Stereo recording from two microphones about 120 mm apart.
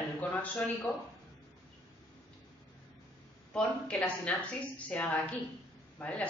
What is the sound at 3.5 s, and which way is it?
A woman's voice, 10° left (ahead or behind).